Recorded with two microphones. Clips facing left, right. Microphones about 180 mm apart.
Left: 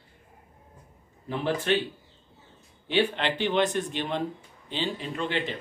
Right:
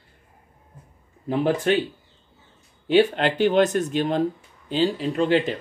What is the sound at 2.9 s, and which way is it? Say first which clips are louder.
Speech: right 7 dB; 45° right (ahead or behind).